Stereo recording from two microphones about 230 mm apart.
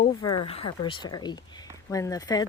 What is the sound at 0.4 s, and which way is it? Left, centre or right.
Speech, left.